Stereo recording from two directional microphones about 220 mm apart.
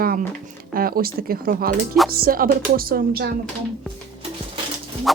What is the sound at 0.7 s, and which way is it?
A woman's voice, 40° right (ahead or behind).